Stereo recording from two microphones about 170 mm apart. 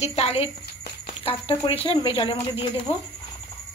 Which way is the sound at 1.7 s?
30° left (ahead or behind).